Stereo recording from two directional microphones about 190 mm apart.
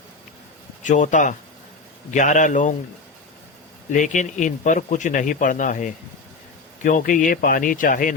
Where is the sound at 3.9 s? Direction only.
40° left (ahead or behind).